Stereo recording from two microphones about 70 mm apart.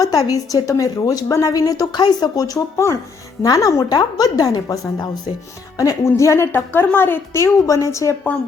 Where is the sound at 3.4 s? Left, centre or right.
Left.